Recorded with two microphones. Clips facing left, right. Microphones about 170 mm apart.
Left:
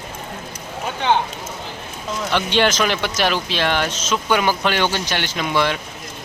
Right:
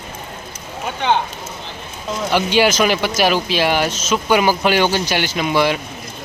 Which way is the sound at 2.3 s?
10° right (ahead or behind).